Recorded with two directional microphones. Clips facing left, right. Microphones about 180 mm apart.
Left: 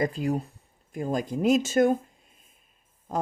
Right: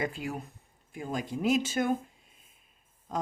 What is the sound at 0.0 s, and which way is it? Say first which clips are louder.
Speech: left 7 dB; 40° left (ahead or behind).